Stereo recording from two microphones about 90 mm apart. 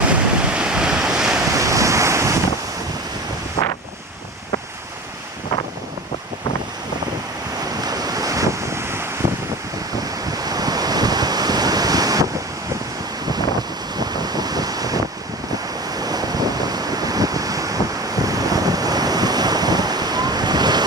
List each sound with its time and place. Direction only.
0.1 s waves: 10° right (ahead or behind)
1.5 s waves: 40° right (ahead or behind)
7.8 s waves: 45° right (ahead or behind); by 9.0 s 30° right (ahead or behind)
10.3 s waves: 45° right (ahead or behind)
13.9 s wind noise: 50° right (ahead or behind)
16.0 s waves: 45° right (ahead or behind)